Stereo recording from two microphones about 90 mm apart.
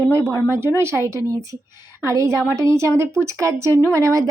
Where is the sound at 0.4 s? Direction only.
30° right (ahead or behind).